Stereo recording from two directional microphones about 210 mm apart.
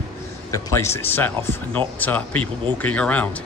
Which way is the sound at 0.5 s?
15° left (ahead or behind).